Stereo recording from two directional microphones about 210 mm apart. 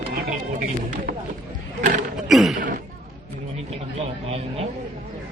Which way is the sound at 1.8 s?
35° right (ahead or behind).